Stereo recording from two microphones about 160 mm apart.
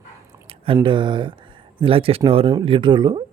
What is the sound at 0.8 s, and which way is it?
A man's voice, 30° right (ahead or behind).